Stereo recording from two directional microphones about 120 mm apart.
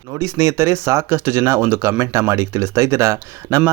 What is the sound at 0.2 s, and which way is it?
Speech, 25° right (ahead or behind).